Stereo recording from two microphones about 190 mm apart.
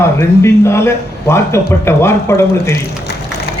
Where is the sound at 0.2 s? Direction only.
15° left (ahead or behind).